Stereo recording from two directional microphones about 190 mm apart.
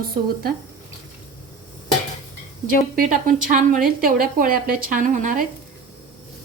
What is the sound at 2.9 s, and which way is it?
A woman's voice, 45° right (ahead or behind).